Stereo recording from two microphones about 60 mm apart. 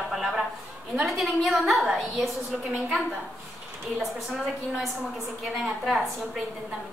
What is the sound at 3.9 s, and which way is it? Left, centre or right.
A woman's voice, centre.